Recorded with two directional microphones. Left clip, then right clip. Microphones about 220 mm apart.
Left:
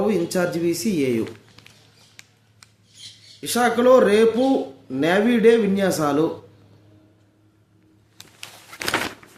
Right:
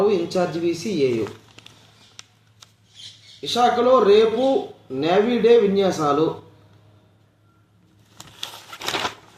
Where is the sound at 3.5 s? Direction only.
15° left (ahead or behind).